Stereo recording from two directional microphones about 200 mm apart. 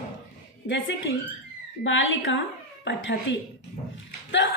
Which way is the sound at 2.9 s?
65° left (ahead or behind).